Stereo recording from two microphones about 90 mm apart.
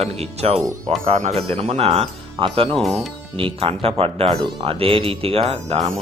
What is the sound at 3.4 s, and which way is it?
Speech, 90° right.